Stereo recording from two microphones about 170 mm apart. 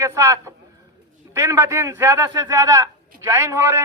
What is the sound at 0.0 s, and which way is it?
A man's voice, 15° right (ahead or behind).